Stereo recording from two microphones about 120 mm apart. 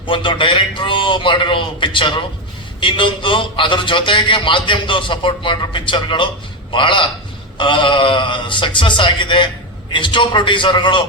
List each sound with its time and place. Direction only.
0.0 s a man's voice: 45° left (ahead or behind)